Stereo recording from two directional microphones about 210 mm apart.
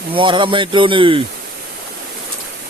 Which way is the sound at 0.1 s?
25° right (ahead or behind).